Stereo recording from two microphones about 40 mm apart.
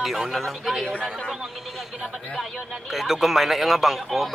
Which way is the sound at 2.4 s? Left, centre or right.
Centre.